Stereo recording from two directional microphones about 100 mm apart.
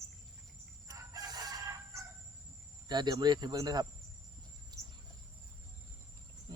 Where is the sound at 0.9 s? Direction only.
40° right (ahead or behind).